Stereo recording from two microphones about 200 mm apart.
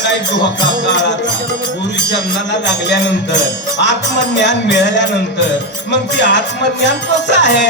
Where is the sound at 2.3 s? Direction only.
60° left (ahead or behind).